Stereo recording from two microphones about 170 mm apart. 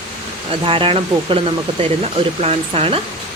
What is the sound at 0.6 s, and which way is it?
Speech, 30° right (ahead or behind).